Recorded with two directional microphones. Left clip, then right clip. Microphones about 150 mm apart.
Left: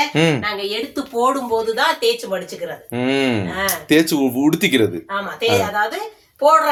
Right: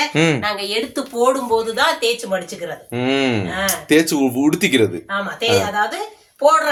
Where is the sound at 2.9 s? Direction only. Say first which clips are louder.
Even; 10° left (ahead or behind).